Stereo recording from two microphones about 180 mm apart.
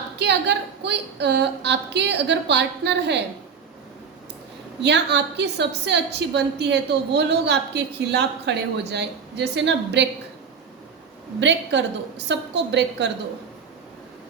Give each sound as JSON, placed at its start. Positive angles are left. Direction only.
{"t": 0.2, "sound": "a woman's voice", "side_deg": -70}
{"t": 4.8, "sound": "a woman's voice", "side_deg": -70}
{"t": 11.3, "sound": "a woman's voice", "side_deg": -75}